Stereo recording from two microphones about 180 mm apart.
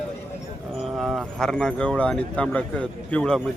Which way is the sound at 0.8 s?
Centre (ahead or behind).